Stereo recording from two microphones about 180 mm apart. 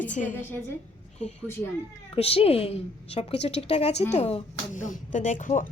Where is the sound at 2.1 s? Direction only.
30° left (ahead or behind).